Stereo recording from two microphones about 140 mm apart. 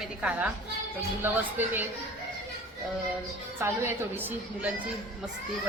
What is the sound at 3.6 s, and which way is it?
A woman's voice, 15° right (ahead or behind).